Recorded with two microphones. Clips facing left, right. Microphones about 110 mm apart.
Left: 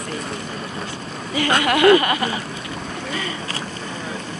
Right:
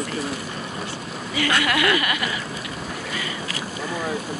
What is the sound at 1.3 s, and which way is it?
Speech, 35° left (ahead or behind).